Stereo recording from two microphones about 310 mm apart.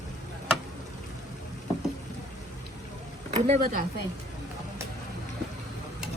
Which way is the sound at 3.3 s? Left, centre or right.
Right.